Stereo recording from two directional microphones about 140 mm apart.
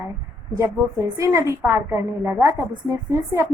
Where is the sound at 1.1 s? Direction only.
20° right (ahead or behind).